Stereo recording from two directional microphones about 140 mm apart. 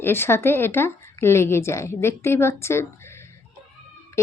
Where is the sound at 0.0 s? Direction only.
15° left (ahead or behind).